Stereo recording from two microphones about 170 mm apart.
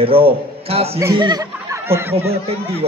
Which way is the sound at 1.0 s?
20° right (ahead or behind).